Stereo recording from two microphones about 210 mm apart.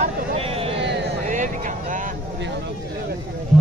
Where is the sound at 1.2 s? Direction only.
35° right (ahead or behind).